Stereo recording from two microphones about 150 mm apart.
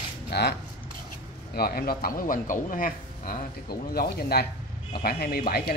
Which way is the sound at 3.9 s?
90° left.